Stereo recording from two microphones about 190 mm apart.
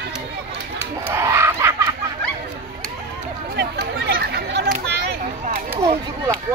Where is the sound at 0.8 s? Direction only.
15° right (ahead or behind).